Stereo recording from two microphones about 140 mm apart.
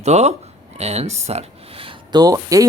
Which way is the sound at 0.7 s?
50° right (ahead or behind).